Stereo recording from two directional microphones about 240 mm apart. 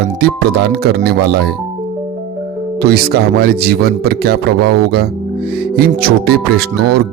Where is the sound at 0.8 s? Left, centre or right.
Right.